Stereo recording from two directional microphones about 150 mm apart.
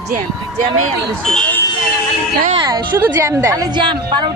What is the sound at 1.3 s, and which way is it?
Speech, 5° left (ahead or behind).